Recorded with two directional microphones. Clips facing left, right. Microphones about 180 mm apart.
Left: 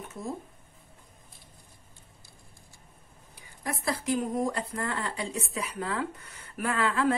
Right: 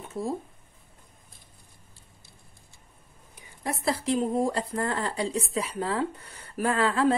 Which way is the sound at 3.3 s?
30° right (ahead or behind).